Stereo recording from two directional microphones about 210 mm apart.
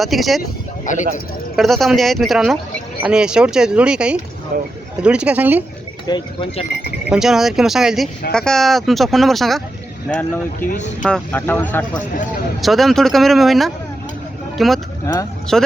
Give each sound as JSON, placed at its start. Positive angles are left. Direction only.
{"t": 0.0, "sound": "speech", "side_deg": 0}
{"t": 0.9, "sound": "speech", "side_deg": 35}
{"t": 1.5, "sound": "speech", "side_deg": 0}
{"t": 4.5, "sound": "speech", "side_deg": -40}
{"t": 5.0, "sound": "speech", "side_deg": -5}
{"t": 6.1, "sound": "speech", "side_deg": 20}
{"t": 7.1, "sound": "a man's voice", "side_deg": 0}
{"t": 10.7, "sound": "speech", "side_deg": 35}
{"t": 11.0, "sound": "a man's voice", "side_deg": 5}
{"t": 15.0, "sound": "a man's voice", "side_deg": 15}
{"t": 15.5, "sound": "speech", "side_deg": 0}